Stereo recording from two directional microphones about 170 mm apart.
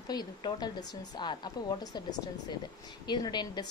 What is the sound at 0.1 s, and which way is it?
A woman's voice, 25° left (ahead or behind).